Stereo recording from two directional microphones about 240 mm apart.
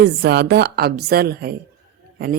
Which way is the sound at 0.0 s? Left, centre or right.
Right.